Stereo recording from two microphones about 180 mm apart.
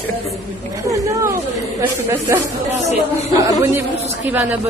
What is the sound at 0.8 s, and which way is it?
Speech, 15° right (ahead or behind).